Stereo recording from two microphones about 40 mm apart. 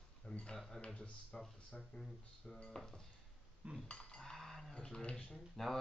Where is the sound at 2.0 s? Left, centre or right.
Centre.